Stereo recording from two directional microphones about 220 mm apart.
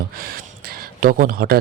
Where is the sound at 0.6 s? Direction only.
45° right (ahead or behind).